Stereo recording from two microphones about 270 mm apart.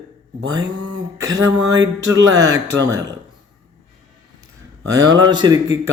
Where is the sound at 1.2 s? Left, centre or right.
Centre.